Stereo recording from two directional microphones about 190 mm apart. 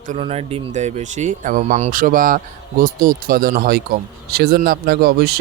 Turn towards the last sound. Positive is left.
turn(degrees=-55)  # may be behind; listen again after turning